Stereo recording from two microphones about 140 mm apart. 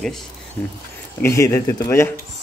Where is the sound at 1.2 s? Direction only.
20° left (ahead or behind).